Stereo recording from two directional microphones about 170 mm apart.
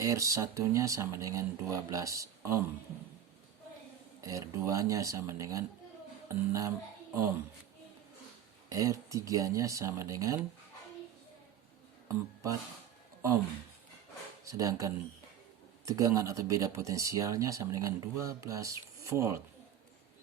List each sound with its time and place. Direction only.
0.0 s speech: 20° right (ahead or behind)
4.2 s speech: 20° right (ahead or behind)
8.7 s speech: 20° right (ahead or behind)
12.0 s speech: 20° right (ahead or behind)
14.4 s speech: 20° right (ahead or behind)